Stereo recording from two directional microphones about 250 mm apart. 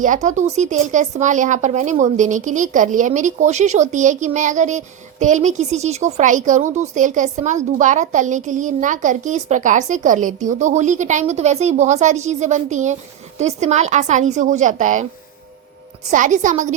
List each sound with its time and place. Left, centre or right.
0.0 s a woman's voice: right
16.0 s a woman's voice: right